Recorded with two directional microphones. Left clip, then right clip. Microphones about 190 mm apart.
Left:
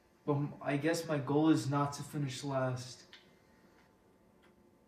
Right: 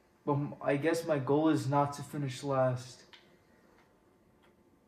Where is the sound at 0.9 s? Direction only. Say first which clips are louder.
Right 3 dB; 35° right (ahead or behind).